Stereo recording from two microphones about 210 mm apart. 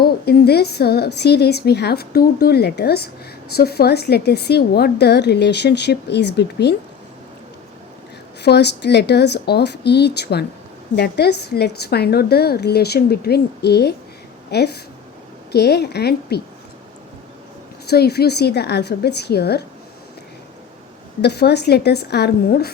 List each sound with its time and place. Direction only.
0.0 s a woman's voice: 50° left (ahead or behind)
8.4 s a woman's voice: 50° left (ahead or behind)
17.8 s a woman's voice: 50° left (ahead or behind)
21.2 s a woman's voice: 50° left (ahead or behind)